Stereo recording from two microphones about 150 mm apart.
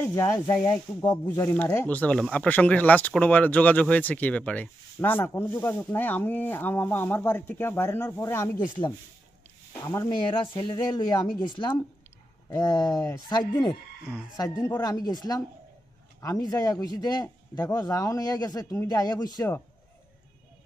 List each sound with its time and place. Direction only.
0.1 s a man's voice: 20° left (ahead or behind)
9.8 s a man's voice: 20° left (ahead or behind)
10.3 s a woman's voice: 35° left (ahead or behind)